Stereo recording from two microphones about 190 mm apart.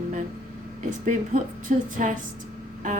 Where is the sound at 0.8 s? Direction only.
40° right (ahead or behind).